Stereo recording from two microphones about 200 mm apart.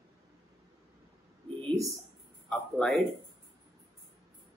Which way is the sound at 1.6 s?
Centre (ahead or behind).